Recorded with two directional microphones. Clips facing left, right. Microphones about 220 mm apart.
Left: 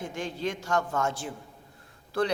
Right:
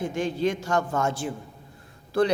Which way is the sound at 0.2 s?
15° right (ahead or behind).